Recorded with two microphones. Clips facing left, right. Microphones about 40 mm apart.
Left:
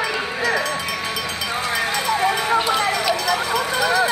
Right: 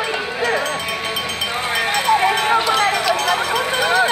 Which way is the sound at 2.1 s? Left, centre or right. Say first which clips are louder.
Right 4 dB; right.